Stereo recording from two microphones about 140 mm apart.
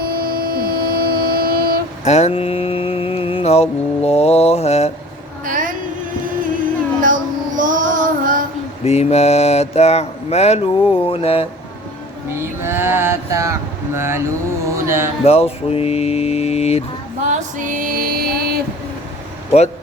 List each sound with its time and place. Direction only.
0.0 s train: 90° right
2.0 s mantra: 50° left (ahead or behind)
5.5 s a sound: 75° right (ahead or behind)
7.0 s child singing: 75° right (ahead or behind)
8.8 s mantra: 50° left (ahead or behind)
12.4 s mantra: 15° right (ahead or behind)
14.8 s speech: 20° right (ahead or behind)
15.2 s mantra: 45° left (ahead or behind)
17.2 s music: 65° right (ahead or behind); by 18.6 s 90° right
19.5 s mantra: 50° left (ahead or behind)